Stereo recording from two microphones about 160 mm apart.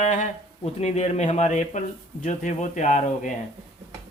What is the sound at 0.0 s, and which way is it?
Speech, 50° left (ahead or behind).